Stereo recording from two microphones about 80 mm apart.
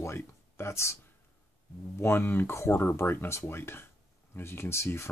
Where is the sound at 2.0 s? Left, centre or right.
Left.